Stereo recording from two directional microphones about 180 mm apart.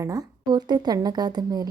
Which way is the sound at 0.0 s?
20° right (ahead or behind).